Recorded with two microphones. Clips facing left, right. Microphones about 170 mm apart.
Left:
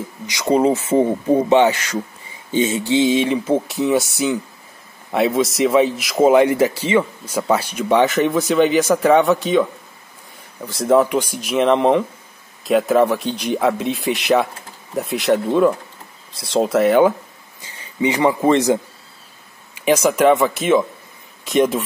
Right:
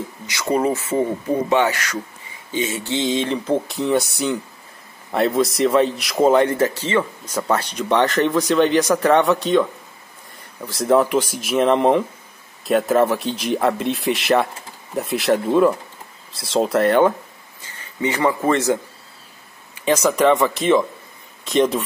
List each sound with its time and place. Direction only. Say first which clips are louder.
0.3 s speech: left 4 dB; 20° left (ahead or behind)
2.8 s a man's voice: left 5 dB; 10° left (ahead or behind)
17.6 s a man's voice: left 4 dB; 15° left (ahead or behind)